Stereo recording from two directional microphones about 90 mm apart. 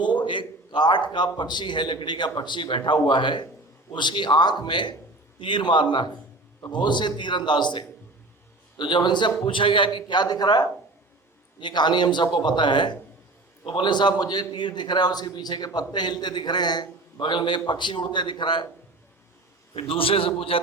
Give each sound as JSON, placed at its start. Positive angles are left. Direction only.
{"t": 0.0, "sound": "a man's voice", "side_deg": 60}
{"t": 19.7, "sound": "a man's voice", "side_deg": 90}